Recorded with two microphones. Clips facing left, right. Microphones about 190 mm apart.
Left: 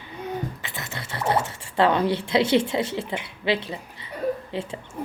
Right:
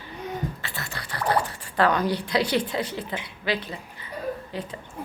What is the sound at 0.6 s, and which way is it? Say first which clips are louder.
A woman's voice: left 1 dB; 20° left (ahead or behind).